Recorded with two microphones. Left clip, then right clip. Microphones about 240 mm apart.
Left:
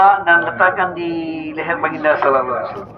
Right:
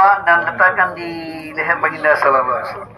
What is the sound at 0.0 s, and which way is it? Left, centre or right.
A man's voice, right.